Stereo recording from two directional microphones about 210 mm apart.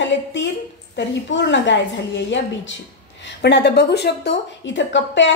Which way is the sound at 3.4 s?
55° left (ahead or behind).